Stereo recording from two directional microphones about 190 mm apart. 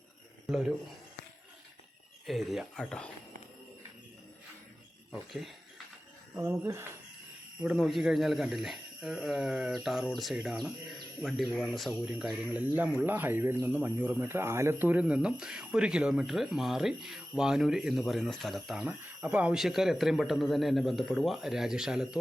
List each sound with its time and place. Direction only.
0.4 s speech: centre (ahead or behind)
2.2 s speech: centre (ahead or behind)
5.1 s speech: centre (ahead or behind)
6.3 s speech: 15° right (ahead or behind)
7.6 s speech: centre (ahead or behind)